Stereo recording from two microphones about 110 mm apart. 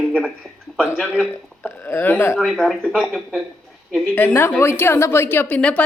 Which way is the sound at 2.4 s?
5° left (ahead or behind).